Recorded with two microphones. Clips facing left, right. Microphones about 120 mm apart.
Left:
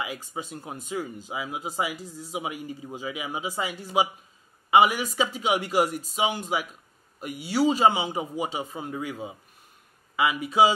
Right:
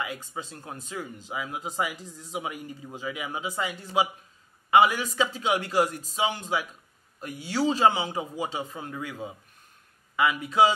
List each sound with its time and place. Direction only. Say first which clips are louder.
0.0 s speech: left 1 dB; 10° left (ahead or behind)